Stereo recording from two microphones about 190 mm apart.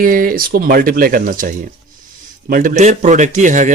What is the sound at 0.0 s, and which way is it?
Speech, 50° right (ahead or behind).